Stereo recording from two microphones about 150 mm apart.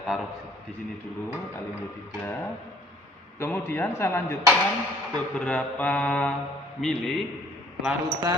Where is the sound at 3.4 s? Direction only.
15° left (ahead or behind).